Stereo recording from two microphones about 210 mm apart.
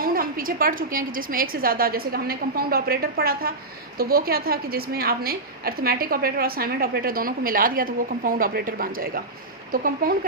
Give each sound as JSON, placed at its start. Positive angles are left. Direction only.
{"t": 0.0, "sound": "a woman's voice", "side_deg": -45}